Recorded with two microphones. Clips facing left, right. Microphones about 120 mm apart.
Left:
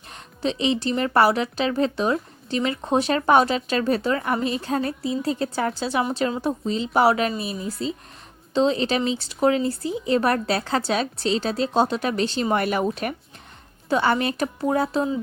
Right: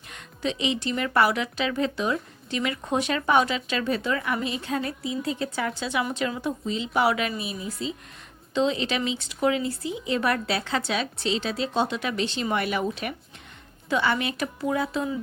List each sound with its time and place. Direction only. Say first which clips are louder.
0.1 s a woman's voice: left 3 dB; 35° left (ahead or behind)